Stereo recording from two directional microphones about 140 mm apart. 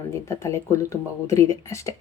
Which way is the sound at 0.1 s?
20° left (ahead or behind).